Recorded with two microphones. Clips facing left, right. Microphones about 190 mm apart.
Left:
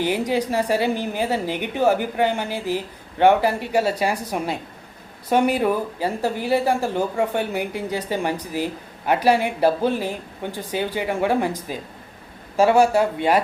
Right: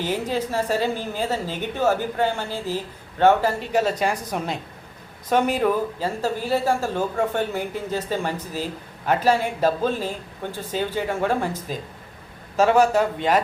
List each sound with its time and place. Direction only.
0.0 s a woman's voice: 15° left (ahead or behind)